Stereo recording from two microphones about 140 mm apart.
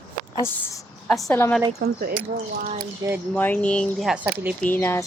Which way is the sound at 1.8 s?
90° right.